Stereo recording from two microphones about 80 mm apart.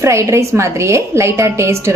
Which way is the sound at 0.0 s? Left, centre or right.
Right.